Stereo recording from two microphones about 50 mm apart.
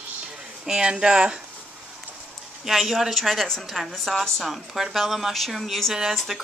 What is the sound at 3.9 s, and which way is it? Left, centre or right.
Speech, centre.